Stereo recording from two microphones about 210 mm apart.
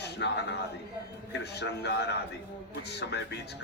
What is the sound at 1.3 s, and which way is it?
Speech, 55° left (ahead or behind).